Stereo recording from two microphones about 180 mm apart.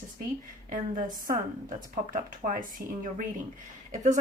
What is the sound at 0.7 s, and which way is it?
Speech, 45° right (ahead or behind).